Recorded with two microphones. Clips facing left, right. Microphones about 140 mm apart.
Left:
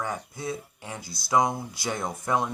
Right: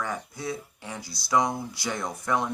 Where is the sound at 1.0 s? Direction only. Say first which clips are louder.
Left 1 dB; 50° left (ahead or behind).